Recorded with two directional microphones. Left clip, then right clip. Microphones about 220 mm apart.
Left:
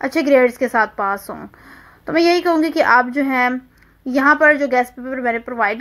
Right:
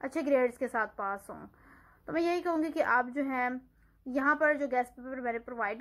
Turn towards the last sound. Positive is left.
turn(degrees=35)  # may be behind; listen again after turning